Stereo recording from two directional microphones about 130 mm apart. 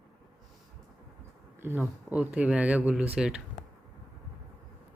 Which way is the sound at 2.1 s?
10° right (ahead or behind).